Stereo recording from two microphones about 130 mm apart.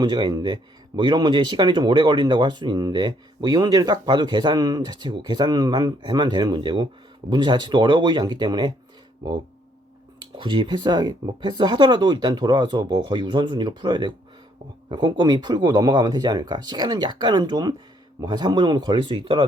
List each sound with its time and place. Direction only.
0.0 s speech: 35° right (ahead or behind)
10.2 s speech: 35° right (ahead or behind)